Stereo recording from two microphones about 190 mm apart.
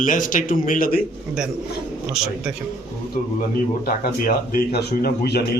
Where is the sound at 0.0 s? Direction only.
45° left (ahead or behind).